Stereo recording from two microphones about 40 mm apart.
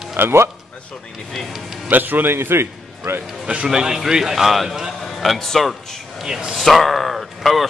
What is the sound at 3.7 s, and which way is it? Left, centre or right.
A man's voice, centre.